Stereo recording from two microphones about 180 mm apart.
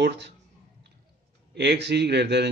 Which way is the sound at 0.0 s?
75° right (ahead or behind).